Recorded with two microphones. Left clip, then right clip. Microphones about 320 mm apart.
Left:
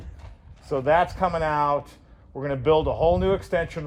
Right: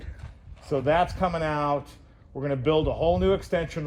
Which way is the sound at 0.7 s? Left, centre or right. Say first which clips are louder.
Left 2 dB; centre.